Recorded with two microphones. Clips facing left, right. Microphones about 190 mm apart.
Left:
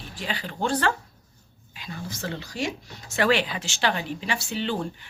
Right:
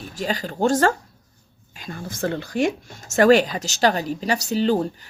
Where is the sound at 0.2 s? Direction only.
40° right (ahead or behind).